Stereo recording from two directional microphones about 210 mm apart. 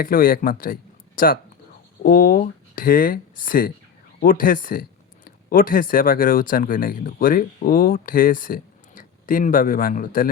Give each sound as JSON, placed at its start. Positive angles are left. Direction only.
{"t": 0.0, "sound": "speech", "side_deg": 45}